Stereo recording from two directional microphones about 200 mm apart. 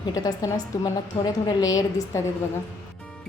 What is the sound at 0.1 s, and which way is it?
A woman's voice, 20° left (ahead or behind).